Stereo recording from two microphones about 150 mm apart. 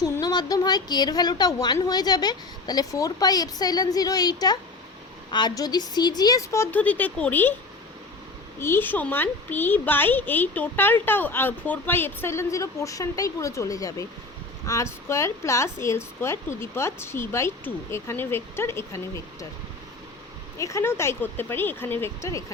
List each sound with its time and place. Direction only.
0.0 s a woman's voice: 25° left (ahead or behind); by 7.5 s 10° left (ahead or behind)
8.5 s a woman's voice: 15° left (ahead or behind)
20.6 s a woman's voice: 20° left (ahead or behind)